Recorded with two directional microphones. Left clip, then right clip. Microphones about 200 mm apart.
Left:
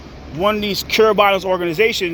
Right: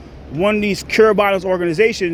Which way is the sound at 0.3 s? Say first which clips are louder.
Right 1 dB; 40° right (ahead or behind).